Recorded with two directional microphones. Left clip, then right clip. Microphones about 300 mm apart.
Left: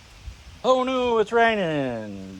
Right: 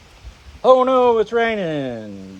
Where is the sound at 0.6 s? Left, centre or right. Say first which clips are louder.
Right 8 dB; centre.